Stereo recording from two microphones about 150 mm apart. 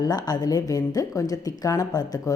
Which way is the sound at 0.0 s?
25° left (ahead or behind).